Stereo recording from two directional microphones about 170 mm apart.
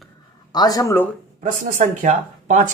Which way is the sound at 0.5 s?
25° left (ahead or behind).